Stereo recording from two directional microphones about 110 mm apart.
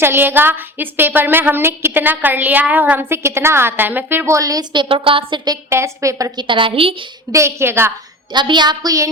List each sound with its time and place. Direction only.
0.0 s a woman's voice: 20° right (ahead or behind)
4.7 s a woman's voice: 50° right (ahead or behind)
5.6 s a woman's voice: 25° right (ahead or behind)
6.3 s a woman's voice: 50° right (ahead or behind)
7.3 s a woman's voice: 25° right (ahead or behind)
8.3 s a woman's voice: 45° right (ahead or behind)